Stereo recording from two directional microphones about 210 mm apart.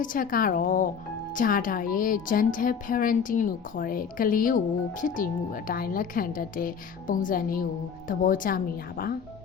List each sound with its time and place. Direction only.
0.0 s a woman's voice: 40° left (ahead or behind)